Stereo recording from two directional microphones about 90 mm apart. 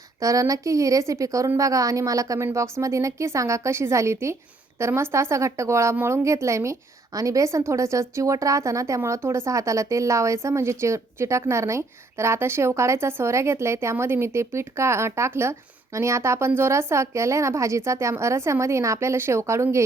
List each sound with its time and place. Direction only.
0.2 s speech: 40° right (ahead or behind)